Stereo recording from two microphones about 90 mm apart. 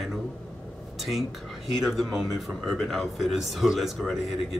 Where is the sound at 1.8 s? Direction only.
Centre (ahead or behind).